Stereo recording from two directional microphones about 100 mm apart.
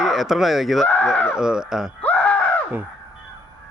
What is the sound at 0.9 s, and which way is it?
Speech, 15° left (ahead or behind).